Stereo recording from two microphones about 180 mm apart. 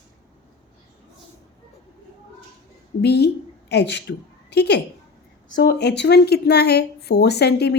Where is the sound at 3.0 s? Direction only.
65° left (ahead or behind).